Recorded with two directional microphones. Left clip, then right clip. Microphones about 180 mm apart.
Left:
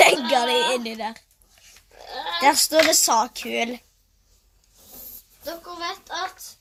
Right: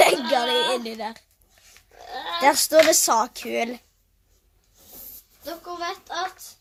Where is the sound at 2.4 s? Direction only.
15° right (ahead or behind).